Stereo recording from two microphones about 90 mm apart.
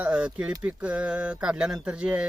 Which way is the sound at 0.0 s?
15° right (ahead or behind).